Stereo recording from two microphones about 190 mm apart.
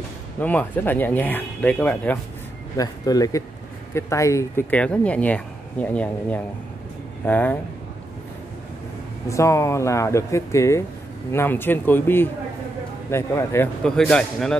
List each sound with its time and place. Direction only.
0.4 s speech: 10° left (ahead or behind)
2.8 s speech: 20° left (ahead or behind)
9.3 s speech: 15° left (ahead or behind)
13.8 s speech: 5° left (ahead or behind)